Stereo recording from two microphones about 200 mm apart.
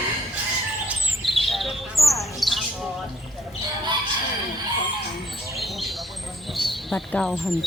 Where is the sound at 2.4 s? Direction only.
Centre (ahead or behind).